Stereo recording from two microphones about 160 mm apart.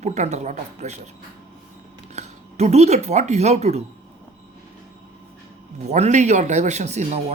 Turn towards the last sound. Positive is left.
turn(degrees=-45)  # may be behind; listen again after turning